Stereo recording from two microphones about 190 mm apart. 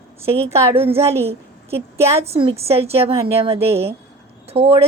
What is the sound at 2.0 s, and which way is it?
A woman's voice, 30° right (ahead or behind).